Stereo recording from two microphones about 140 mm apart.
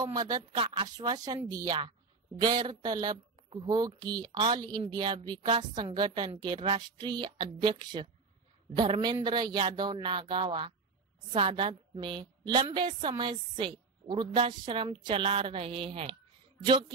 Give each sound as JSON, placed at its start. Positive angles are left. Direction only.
{"t": 0.0, "sound": "speech", "side_deg": -25}
{"t": 0.5, "sound": "a woman's voice", "side_deg": -40}
{"t": 0.8, "sound": "a woman's voice", "side_deg": -25}